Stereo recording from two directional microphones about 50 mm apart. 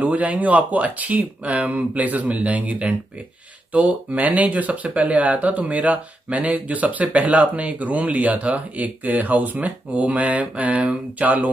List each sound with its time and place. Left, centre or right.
0.0 s speech: right